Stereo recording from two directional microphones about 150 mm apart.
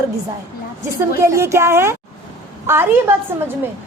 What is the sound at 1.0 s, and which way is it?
A woman's voice, 20° right (ahead or behind).